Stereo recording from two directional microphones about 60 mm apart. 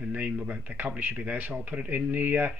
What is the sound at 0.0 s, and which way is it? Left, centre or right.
Speech, right.